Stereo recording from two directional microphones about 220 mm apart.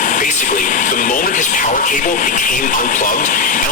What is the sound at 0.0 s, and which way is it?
Speech, 35° left (ahead or behind).